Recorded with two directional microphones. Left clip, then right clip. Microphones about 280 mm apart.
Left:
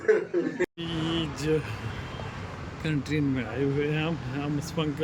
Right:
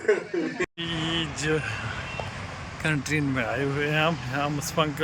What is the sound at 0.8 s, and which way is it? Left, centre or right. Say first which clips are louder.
Speech: right 2 dB; centre.